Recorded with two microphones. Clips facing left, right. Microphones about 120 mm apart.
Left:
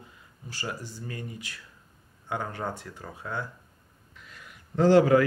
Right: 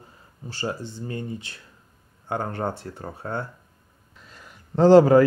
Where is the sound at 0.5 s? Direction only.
30° right (ahead or behind).